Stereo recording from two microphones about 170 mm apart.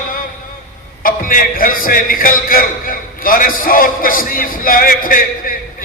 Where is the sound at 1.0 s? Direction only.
55° left (ahead or behind).